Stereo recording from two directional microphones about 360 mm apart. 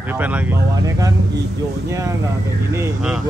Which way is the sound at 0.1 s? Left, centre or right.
Centre.